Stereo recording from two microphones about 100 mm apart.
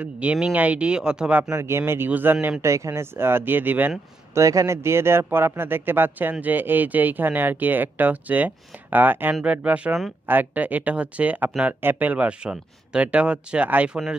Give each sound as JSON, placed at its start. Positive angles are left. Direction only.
{"t": 0.0, "sound": "speech", "side_deg": -15}
{"t": 1.5, "sound": "a man's voice", "side_deg": -25}
{"t": 2.6, "sound": "a man's voice", "side_deg": -30}
{"t": 4.3, "sound": "a man's voice", "side_deg": -30}